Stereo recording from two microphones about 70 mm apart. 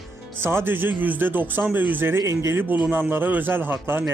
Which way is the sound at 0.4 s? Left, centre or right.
Right.